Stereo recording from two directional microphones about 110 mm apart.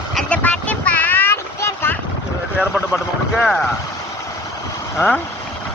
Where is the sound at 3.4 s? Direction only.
5° left (ahead or behind).